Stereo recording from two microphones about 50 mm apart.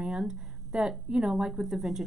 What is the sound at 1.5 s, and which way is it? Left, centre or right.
Speech, centre.